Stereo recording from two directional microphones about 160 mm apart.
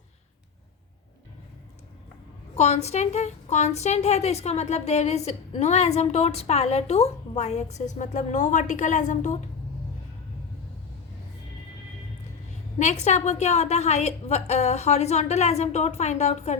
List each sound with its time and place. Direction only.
2.6 s a woman's voice: 45° left (ahead or behind)
12.8 s a woman's voice: 45° left (ahead or behind)